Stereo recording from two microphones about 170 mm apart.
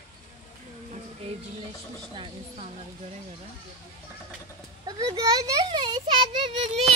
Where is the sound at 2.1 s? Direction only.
35° right (ahead or behind).